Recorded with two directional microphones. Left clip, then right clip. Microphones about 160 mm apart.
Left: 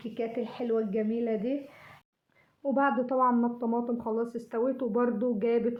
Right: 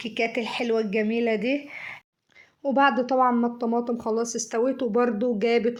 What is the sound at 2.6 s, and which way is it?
Speech, 25° right (ahead or behind).